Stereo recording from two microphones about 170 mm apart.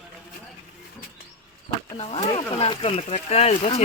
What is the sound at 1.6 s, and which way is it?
Speech, 35° left (ahead or behind).